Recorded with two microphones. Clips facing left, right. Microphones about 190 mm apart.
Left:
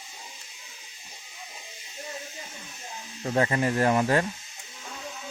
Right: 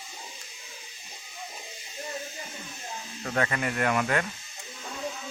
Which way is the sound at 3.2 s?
30° left (ahead or behind).